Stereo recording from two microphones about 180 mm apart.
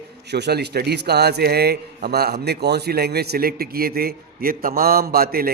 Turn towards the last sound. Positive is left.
turn(degrees=-55)  # may be behind; listen again after turning